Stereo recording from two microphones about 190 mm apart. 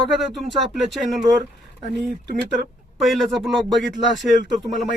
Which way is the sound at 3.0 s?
Centre (ahead or behind).